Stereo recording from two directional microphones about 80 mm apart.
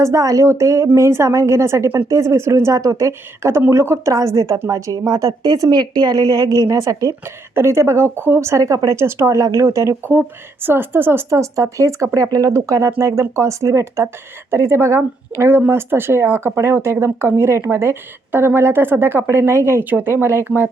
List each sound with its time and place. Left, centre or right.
0.0 s a woman's voice: right
7.5 s speech: right
10.1 s speech: right
11.3 s speech: right